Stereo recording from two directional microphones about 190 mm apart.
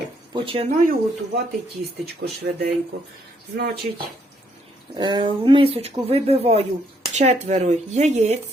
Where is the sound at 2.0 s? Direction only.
55° right (ahead or behind).